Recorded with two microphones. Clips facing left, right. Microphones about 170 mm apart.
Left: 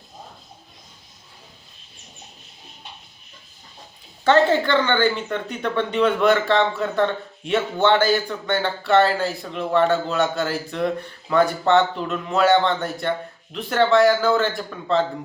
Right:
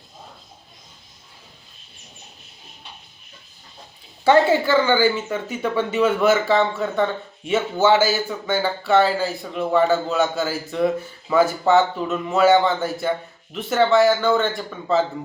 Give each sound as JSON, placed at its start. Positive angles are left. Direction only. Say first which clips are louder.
{"t": 4.2, "sound": "speech", "louder": "right 1 dB", "side_deg": -10}